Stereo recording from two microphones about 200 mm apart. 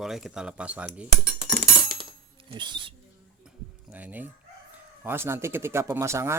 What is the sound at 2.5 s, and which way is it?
Speech, 25° right (ahead or behind).